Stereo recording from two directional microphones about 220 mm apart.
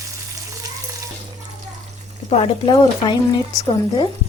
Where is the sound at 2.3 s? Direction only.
25° left (ahead or behind).